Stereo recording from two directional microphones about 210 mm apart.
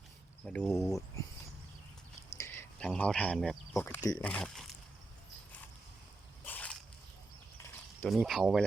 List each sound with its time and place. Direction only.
0.4 s speech: 5° left (ahead or behind)
2.4 s speech: 10° left (ahead or behind)
6.4 s a sound: 5° left (ahead or behind)
8.0 s speech: centre (ahead or behind)